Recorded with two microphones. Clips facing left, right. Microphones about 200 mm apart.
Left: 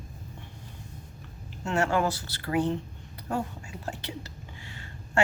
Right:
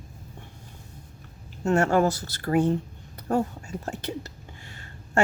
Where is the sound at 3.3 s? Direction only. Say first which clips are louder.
Right 6 dB; 45° right (ahead or behind).